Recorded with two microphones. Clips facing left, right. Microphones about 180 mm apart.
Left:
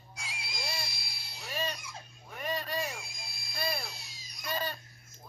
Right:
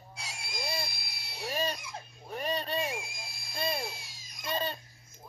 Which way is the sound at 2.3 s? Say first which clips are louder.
Right 3 dB; 30° right (ahead or behind).